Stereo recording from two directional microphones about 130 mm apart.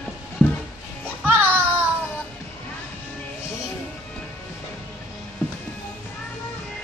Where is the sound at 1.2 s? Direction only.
15° right (ahead or behind).